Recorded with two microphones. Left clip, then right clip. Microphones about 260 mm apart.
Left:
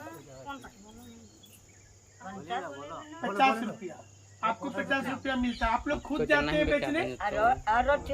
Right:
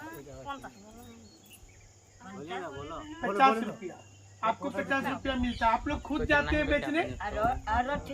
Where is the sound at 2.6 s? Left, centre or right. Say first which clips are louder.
Even; right.